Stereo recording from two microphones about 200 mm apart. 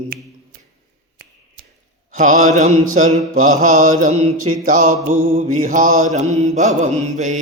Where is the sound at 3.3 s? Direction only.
90° right.